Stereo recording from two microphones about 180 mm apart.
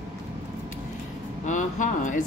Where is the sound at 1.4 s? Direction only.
45° left (ahead or behind).